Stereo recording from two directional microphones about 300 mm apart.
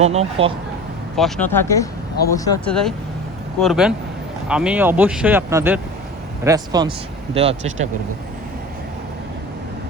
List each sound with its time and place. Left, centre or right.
0.0 s speech: right
1.1 s speech: centre; by 7.9 s right